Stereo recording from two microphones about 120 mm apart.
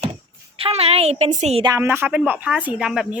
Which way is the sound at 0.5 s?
55° right (ahead or behind).